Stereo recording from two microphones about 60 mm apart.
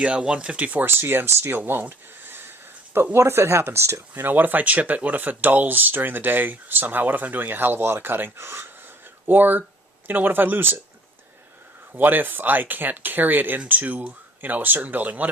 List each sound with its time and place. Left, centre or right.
0.0 s speech: centre
0.9 s speech: right
4.1 s speech: right
11.9 s speech: right